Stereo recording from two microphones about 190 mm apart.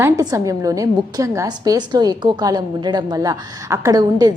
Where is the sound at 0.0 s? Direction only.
15° right (ahead or behind).